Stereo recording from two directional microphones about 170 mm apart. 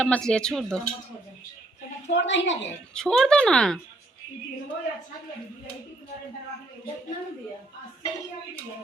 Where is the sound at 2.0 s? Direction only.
90° left.